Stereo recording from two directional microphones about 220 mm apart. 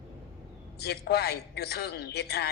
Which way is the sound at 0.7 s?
45° left (ahead or behind).